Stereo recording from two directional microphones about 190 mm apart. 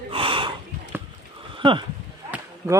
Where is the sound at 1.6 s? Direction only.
25° right (ahead or behind).